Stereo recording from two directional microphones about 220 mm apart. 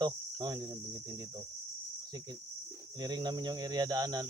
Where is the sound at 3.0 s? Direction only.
20° right (ahead or behind).